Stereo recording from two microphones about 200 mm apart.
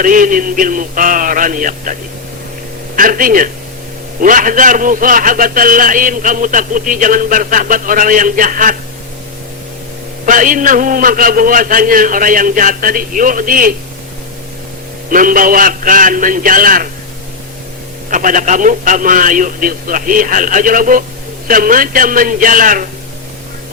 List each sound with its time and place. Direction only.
0.0 s a man's voice: 40° right (ahead or behind)
10.2 s a man's voice: 40° right (ahead or behind)
15.1 s a man's voice: 45° right (ahead or behind)
18.1 s a man's voice: 40° right (ahead or behind)